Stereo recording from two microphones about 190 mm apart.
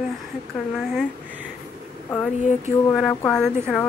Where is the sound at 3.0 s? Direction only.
5° left (ahead or behind).